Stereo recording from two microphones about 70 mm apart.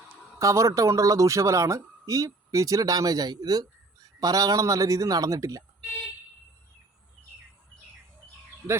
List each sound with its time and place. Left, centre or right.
0.3 s a man's voice: right